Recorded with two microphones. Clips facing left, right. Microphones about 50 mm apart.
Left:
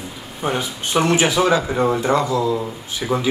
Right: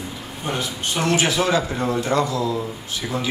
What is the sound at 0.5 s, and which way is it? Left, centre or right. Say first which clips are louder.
Speech: left 4 dB; centre.